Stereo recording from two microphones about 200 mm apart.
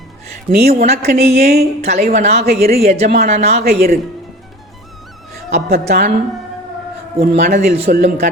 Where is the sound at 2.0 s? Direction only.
45° right (ahead or behind).